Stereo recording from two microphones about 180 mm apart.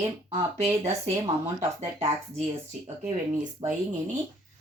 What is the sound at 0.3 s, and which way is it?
Speech, 30° right (ahead or behind).